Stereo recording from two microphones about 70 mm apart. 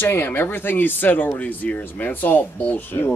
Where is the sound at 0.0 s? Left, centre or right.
Left.